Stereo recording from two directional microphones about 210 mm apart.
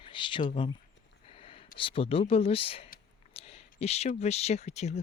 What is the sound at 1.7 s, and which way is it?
Speech, 25° left (ahead or behind).